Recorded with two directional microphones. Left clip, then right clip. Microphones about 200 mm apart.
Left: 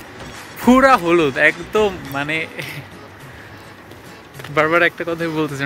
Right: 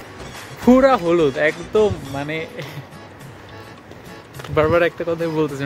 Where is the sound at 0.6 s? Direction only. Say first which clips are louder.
Left 2 dB; centre (ahead or behind).